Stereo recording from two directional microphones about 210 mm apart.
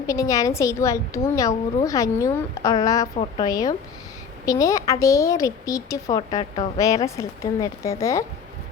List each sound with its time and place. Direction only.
0.1 s a woman's voice: 15° left (ahead or behind)